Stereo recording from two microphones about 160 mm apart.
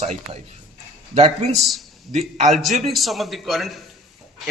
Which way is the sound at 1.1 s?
45° right (ahead or behind).